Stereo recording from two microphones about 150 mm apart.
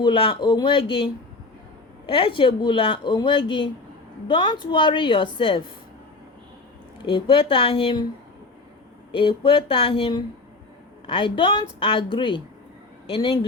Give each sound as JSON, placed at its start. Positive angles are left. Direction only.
{"t": 0.0, "sound": "speech", "side_deg": 35}
{"t": 7.0, "sound": "speech", "side_deg": 35}
{"t": 9.1, "sound": "speech", "side_deg": 35}